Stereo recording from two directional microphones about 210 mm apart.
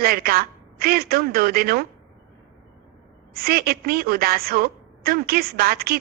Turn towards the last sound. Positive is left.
turn(degrees=-45)  # may be behind; listen again after turning